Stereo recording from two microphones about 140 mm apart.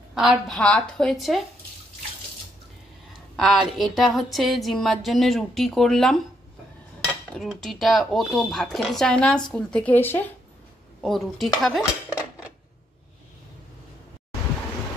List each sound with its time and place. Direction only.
0.1 s a woman's voice: 5° right (ahead or behind)
3.1 s a woman's voice: centre (ahead or behind)
7.3 s a woman's voice: centre (ahead or behind)
11.0 s a woman's voice: centre (ahead or behind)
11.8 s cutlery: 20° left (ahead or behind)